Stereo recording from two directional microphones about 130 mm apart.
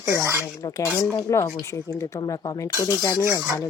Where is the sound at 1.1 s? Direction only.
20° left (ahead or behind).